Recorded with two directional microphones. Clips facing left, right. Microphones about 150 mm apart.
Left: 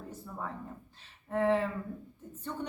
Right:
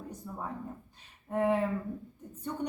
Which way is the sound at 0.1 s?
15° right (ahead or behind).